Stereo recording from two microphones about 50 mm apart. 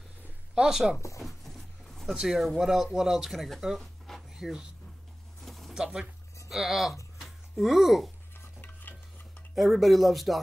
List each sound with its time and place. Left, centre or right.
0.6 s speech: centre
1.2 s a sound: centre
2.1 s speech: centre
5.4 s pigeon: centre
6.5 s speech: centre
7.2 s a sound: centre
9.6 s speech: centre